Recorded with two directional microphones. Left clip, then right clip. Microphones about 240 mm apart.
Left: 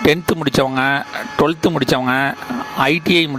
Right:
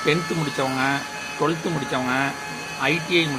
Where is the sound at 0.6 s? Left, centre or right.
Left.